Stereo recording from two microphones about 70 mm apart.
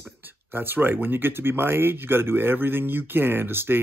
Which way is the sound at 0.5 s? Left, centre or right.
Right.